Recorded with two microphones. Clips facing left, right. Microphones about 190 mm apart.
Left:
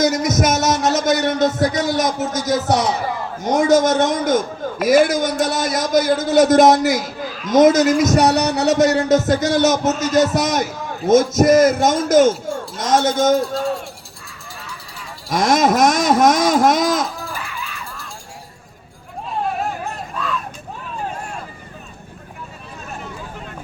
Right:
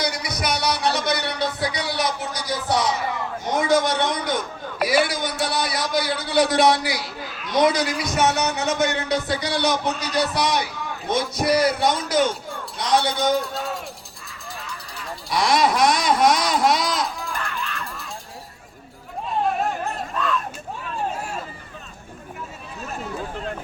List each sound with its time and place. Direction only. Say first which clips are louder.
0.0 s speech: left 10 dB; 45° left (ahead or behind)
7.3 s speech: left 7 dB; centre (ahead or behind)
7.5 s speech: left 8 dB; 45° left (ahead or behind)
13.5 s speech: left 7 dB; centre (ahead or behind)
14.6 s music: even; centre (ahead or behind)
15.3 s speech: left 4 dB; 45° left (ahead or behind)
17.3 s music: right 1 dB; 5° left (ahead or behind)
19.5 s a sound: even; centre (ahead or behind)